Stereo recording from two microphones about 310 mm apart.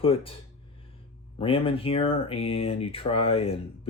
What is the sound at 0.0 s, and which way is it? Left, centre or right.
Speech, centre.